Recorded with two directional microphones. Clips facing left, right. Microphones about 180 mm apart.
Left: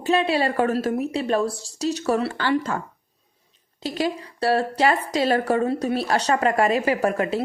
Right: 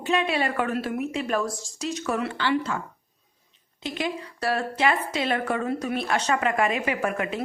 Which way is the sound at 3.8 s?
35° left (ahead or behind).